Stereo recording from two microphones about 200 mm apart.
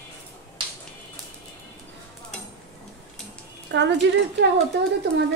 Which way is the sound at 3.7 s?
60° right (ahead or behind).